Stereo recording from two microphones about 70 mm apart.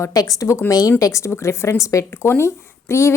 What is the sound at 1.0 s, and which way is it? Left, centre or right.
A woman's voice, left.